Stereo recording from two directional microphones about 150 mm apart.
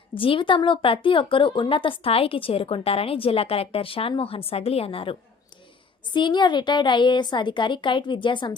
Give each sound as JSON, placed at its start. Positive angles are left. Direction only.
{"t": 0.2, "sound": "a woman's voice", "side_deg": 35}
{"t": 6.1, "sound": "a woman's voice", "side_deg": 30}